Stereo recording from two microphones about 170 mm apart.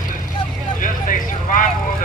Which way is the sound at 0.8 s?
50° left (ahead or behind).